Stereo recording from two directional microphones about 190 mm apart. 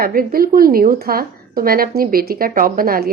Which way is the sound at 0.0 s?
50° right (ahead or behind).